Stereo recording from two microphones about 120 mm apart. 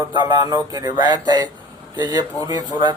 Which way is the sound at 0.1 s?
35° right (ahead or behind).